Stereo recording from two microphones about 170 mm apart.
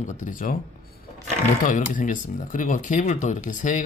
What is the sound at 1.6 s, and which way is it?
Speech, 50° left (ahead or behind).